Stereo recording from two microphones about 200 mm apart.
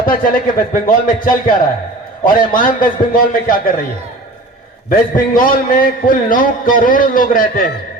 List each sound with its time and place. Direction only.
0.0 s a man's voice: 45° left (ahead or behind)
4.9 s a man's voice: 45° left (ahead or behind)